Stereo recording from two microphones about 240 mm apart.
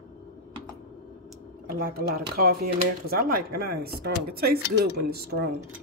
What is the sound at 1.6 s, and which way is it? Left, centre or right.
Speech, right.